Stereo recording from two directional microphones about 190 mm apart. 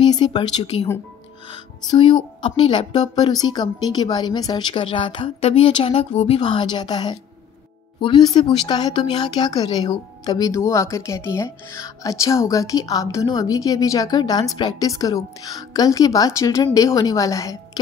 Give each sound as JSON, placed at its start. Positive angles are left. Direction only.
{"t": 0.0, "sound": "speech", "side_deg": 25}